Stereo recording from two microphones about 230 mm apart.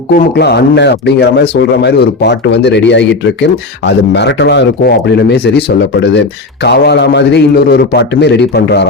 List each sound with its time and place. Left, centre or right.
0.1 s speech: left